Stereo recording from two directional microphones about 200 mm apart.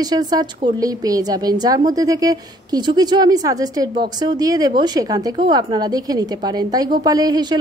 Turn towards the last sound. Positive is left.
turn(degrees=-20)  # may be behind; listen again after turning